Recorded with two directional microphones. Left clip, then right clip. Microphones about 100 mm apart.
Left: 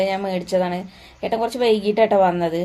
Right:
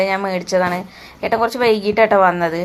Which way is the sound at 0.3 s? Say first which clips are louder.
Right 4 dB; 15° left (ahead or behind).